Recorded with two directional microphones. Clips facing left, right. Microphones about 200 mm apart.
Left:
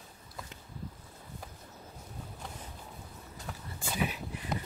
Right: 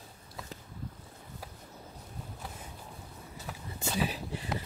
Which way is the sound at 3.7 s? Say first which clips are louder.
Right 2 dB; 30° right (ahead or behind).